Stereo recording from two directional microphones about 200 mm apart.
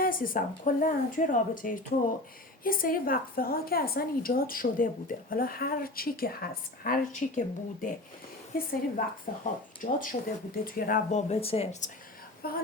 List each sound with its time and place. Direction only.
0.0 s a woman's voice: 45° left (ahead or behind)
12.4 s a woman's voice: 50° left (ahead or behind)